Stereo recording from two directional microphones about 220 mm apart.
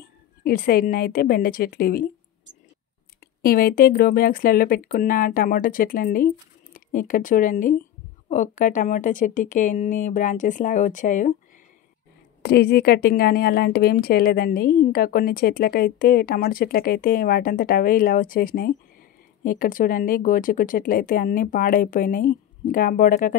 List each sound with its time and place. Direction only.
0.0 s a woman's voice: 45° left (ahead or behind)
3.4 s speech: 40° left (ahead or behind)
12.4 s a woman's voice: 45° left (ahead or behind)